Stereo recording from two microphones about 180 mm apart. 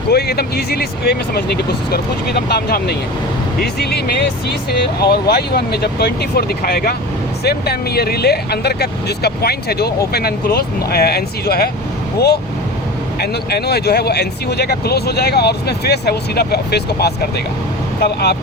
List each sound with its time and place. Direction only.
0.1 s speech: 60° left (ahead or behind)
13.1 s speech: 65° left (ahead or behind)